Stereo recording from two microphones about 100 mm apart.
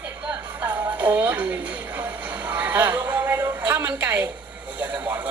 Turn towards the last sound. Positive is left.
turn(degrees=-15)  # may be behind; listen again after turning